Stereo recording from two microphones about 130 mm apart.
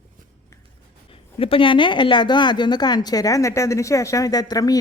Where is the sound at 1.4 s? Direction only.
45° left (ahead or behind).